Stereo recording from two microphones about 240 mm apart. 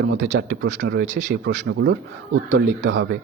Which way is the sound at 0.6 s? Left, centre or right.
Right.